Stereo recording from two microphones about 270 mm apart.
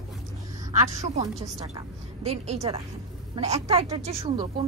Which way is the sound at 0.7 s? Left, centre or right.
Right.